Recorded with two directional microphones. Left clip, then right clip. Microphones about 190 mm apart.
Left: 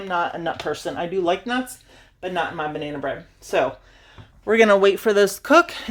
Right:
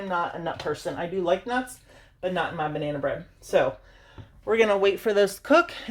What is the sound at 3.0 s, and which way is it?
Speech, 45° left (ahead or behind).